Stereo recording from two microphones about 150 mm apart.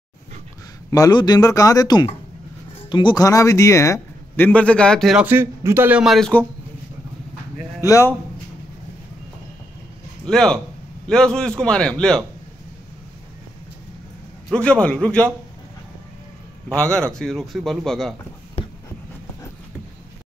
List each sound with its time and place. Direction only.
0.8 s speech: 25° left (ahead or behind); by 5.2 s 5° left (ahead or behind)
5.2 s speech: 15° right (ahead or behind); by 6.4 s 5° left (ahead or behind)
7.8 s speech: 20° left (ahead or behind)
10.2 s a man's voice: 5° left (ahead or behind)
14.5 s a man's voice: 5° left (ahead or behind)
16.8 s a man's voice: 5° left (ahead or behind)